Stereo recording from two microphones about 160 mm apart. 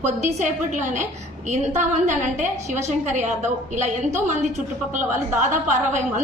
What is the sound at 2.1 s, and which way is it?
A woman's voice, 50° right (ahead or behind).